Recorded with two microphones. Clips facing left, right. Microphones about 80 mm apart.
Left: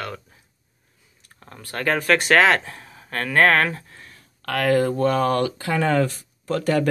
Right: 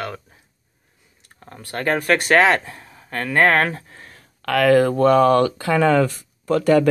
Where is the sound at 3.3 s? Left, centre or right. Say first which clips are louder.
Right 1 dB; centre.